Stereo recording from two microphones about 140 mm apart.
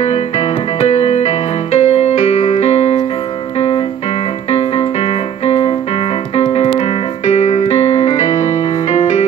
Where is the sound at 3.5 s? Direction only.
45° left (ahead or behind).